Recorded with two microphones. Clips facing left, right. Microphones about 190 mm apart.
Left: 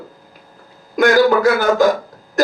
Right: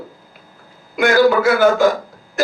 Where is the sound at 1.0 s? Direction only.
40° left (ahead or behind).